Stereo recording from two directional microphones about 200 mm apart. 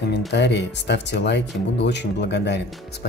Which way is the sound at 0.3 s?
60° left (ahead or behind).